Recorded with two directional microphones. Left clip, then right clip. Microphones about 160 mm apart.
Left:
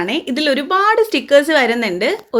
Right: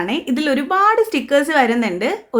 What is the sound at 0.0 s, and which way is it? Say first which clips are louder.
Speech: left 2 dB; 10° left (ahead or behind).